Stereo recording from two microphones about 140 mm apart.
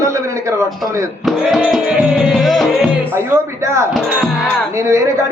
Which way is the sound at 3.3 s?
20° right (ahead or behind).